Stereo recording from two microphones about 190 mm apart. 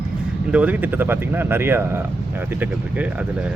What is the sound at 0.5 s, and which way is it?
Speech, 5° right (ahead or behind).